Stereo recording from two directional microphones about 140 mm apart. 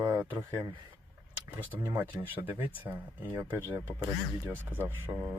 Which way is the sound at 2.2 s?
15° right (ahead or behind).